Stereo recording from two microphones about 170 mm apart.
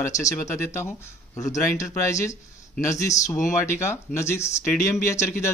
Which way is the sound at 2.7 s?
45° left (ahead or behind).